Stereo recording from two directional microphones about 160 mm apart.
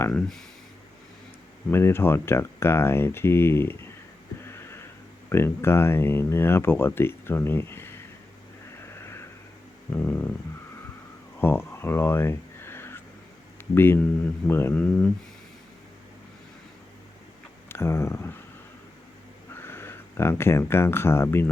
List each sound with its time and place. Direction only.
0.1 s speech: 5° left (ahead or behind)
1.7 s speech: 15° left (ahead or behind)
4.4 s a sound: 15° left (ahead or behind)
5.3 s speech: 15° left (ahead or behind)
8.8 s vehicle: 15° left (ahead or behind)
9.9 s a sound: 10° left (ahead or behind)
11.3 s a sound: 15° left (ahead or behind)
13.7 s speech: 15° left (ahead or behind)
17.7 s speech: 15° left (ahead or behind)
19.5 s speech: 15° left (ahead or behind)